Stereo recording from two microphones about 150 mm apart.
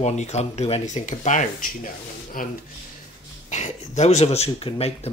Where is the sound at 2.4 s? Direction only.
70° left (ahead or behind).